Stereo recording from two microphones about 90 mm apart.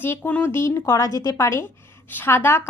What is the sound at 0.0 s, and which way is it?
A woman's voice, 25° left (ahead or behind).